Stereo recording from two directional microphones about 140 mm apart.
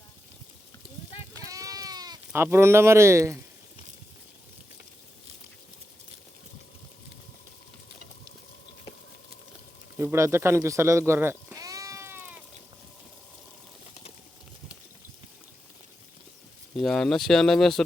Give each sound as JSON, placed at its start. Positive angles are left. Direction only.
{"t": 1.5, "sound": "sheep", "side_deg": -25}
{"t": 2.3, "sound": "speech", "side_deg": -15}
{"t": 10.0, "sound": "speech", "side_deg": -20}
{"t": 16.7, "sound": "speech", "side_deg": 5}